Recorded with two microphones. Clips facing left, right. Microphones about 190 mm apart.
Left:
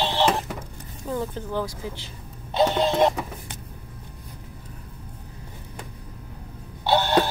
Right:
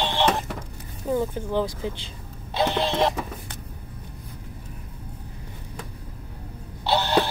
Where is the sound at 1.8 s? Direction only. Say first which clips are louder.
Right 4 dB; 25° right (ahead or behind).